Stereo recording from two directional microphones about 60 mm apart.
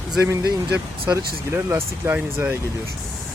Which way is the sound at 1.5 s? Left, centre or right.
Right.